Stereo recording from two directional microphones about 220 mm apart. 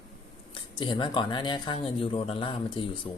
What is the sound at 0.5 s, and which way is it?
Speech, 20° left (ahead or behind).